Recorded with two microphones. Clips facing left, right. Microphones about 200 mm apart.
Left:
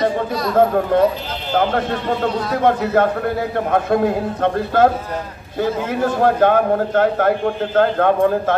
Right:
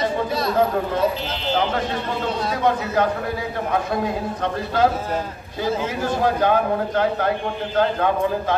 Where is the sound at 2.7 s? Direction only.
55° left (ahead or behind).